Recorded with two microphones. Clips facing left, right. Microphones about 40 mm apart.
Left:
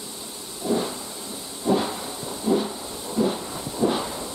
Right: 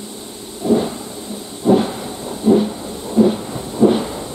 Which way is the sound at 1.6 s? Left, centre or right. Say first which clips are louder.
Right 8 dB; right.